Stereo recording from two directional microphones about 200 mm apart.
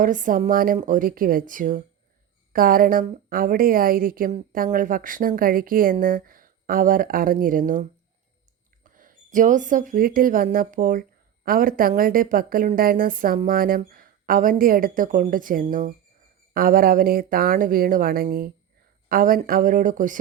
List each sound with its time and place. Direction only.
0.0 s a woman's voice: 40° right (ahead or behind)